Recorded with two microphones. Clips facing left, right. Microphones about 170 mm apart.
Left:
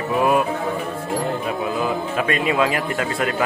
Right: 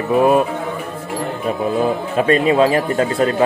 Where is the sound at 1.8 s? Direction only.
35° right (ahead or behind).